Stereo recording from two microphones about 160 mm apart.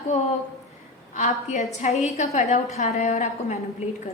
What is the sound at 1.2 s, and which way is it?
A woman's voice, 45° left (ahead or behind).